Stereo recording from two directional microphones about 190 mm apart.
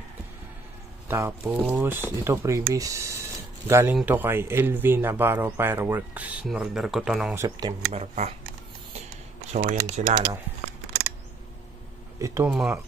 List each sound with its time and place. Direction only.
1.0 s speech: 10° right (ahead or behind)
7.3 s speech: 20° right (ahead or behind)
7.9 s speech: 35° right (ahead or behind)
9.5 s speech: 35° right (ahead or behind)
10.0 s speech: 55° right (ahead or behind)
12.4 s speech: 5° right (ahead or behind)